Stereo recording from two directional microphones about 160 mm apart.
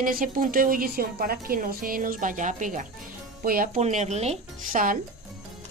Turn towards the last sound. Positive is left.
turn(degrees=-60)  # may be behind; listen again after turning